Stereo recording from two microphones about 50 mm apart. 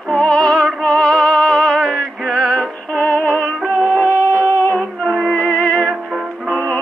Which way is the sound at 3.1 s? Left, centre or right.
Left.